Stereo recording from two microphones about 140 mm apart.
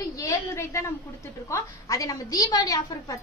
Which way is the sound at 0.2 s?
25° left (ahead or behind).